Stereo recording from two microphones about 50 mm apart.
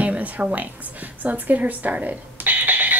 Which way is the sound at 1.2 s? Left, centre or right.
Right.